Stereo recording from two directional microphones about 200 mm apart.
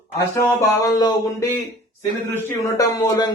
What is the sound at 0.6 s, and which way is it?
A man's voice, 15° left (ahead or behind).